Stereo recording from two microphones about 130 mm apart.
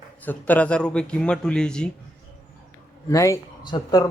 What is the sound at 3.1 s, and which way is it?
Speech, 25° left (ahead or behind).